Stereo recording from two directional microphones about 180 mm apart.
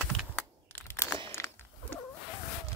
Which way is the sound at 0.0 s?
5° left (ahead or behind).